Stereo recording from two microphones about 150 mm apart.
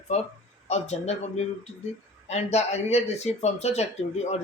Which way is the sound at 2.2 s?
45° left (ahead or behind).